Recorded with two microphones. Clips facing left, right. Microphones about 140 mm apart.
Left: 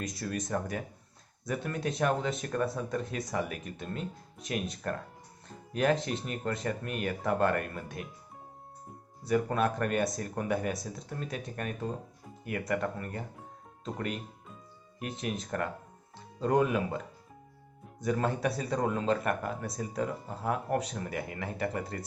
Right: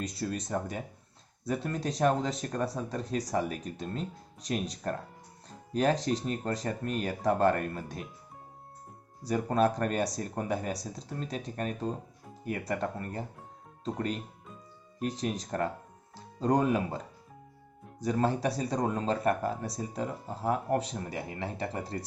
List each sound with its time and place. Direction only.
0.0 s speech: 30° right (ahead or behind)
9.2 s speech: 30° right (ahead or behind)
18.0 s speech: 30° right (ahead or behind)